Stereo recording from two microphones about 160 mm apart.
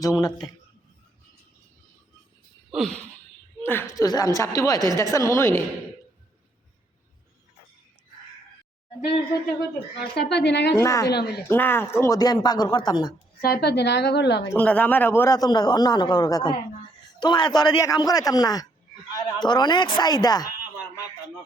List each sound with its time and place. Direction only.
0.0 s a man's voice: 20° left (ahead or behind)
2.7 s a sound: centre (ahead or behind)
3.6 s a man's voice: 15° left (ahead or behind)
10.2 s a woman's voice: 90° left
10.8 s a man's voice: 20° left (ahead or behind)
11.1 s a woman's voice: 90° left
11.4 s a man's voice: 15° left (ahead or behind)
13.4 s a woman's voice: 80° left
14.5 s a man's voice: 10° left (ahead or behind); by 20.5 s 25° left (ahead or behind)